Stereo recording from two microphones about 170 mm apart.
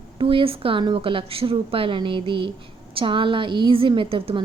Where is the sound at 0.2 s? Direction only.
30° right (ahead or behind).